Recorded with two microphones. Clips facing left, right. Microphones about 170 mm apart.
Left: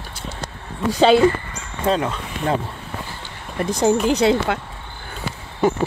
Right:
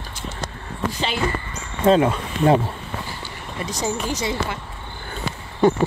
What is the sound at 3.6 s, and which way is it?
Speech, 55° left (ahead or behind).